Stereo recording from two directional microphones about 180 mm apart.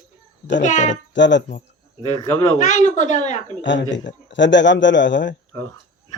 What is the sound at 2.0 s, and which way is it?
Speech, 20° left (ahead or behind).